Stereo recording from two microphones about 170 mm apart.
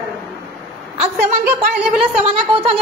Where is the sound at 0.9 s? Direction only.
35° right (ahead or behind).